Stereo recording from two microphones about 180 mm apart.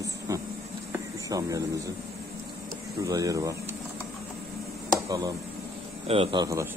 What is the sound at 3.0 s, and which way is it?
Speech, 20° right (ahead or behind).